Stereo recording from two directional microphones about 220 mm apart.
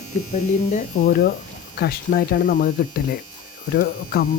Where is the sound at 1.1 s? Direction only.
40° left (ahead or behind).